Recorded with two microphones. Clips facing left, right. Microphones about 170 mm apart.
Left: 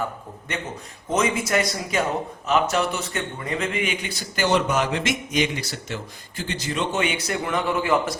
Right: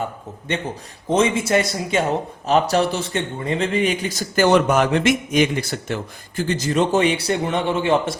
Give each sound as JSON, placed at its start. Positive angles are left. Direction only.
{"t": 1.1, "sound": "a man's voice", "side_deg": -25}